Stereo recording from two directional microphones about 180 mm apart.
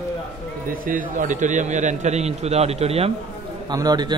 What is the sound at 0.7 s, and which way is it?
A man's voice, 50° right (ahead or behind).